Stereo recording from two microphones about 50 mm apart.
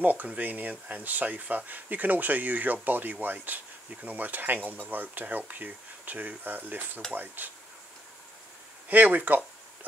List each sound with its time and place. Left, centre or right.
0.0 s speech: right
8.8 s speech: right